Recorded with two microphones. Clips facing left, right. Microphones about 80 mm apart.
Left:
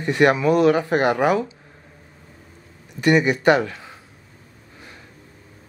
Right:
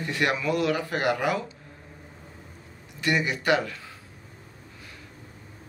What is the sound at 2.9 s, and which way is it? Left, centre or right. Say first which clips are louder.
Speech: left 9 dB; left.